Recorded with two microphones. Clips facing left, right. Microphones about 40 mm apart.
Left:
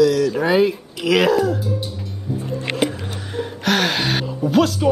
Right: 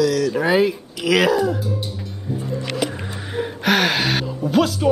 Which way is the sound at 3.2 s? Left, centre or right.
Centre.